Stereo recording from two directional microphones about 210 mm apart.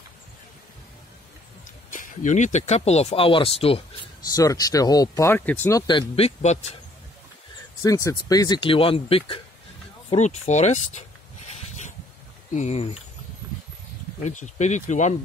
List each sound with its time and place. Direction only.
1.9 s speech: 40° left (ahead or behind)
4.3 s speech: 15° left (ahead or behind)
7.8 s speech: 15° left (ahead or behind); by 11.1 s 30° left (ahead or behind)
12.5 s speech: 30° left (ahead or behind)
14.2 s speech: 35° left (ahead or behind)